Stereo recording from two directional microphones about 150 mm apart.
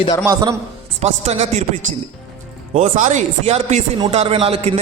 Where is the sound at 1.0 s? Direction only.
45° right (ahead or behind).